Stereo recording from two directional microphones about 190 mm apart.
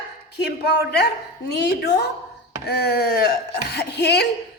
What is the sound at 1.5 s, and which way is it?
A woman's voice, 65° left (ahead or behind).